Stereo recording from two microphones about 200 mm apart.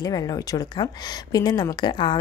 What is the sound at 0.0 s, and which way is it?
A woman's voice, 20° left (ahead or behind).